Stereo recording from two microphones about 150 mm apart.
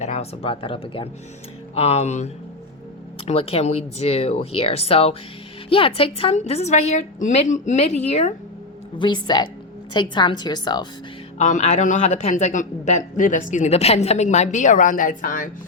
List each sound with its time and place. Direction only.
0.0 s a man's voice: 45° left (ahead or behind)
9.0 s a woman's voice: 30° left (ahead or behind)
11.3 s a man's voice: 50° left (ahead or behind)